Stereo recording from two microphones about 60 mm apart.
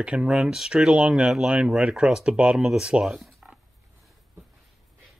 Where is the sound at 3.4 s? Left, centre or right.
Right.